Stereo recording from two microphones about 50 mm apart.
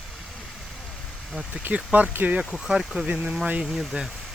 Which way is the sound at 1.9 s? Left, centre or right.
Right.